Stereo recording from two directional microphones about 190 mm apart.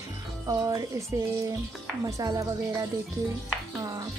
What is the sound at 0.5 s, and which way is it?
Speech, 15° right (ahead or behind).